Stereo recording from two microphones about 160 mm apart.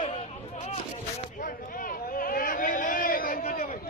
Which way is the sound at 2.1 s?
60° left (ahead or behind).